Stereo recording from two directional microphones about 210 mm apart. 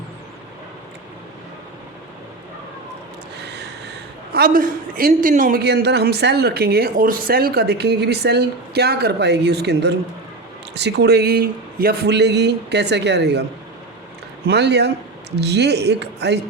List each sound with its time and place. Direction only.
3.4 s a man's voice: 55° right (ahead or behind)
14.4 s a man's voice: 55° right (ahead or behind)